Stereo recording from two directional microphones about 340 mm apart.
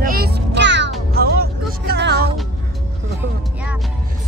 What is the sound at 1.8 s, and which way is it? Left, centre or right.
Music, right.